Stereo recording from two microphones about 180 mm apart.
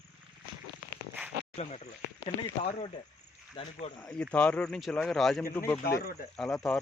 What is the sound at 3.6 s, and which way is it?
Speech, 30° left (ahead or behind).